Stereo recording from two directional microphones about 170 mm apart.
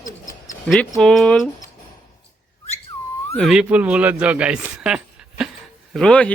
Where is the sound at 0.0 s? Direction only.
50° left (ahead or behind).